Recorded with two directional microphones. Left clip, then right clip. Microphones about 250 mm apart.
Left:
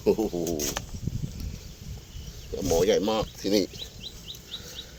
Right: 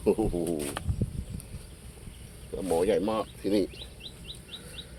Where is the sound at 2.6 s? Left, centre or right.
Centre.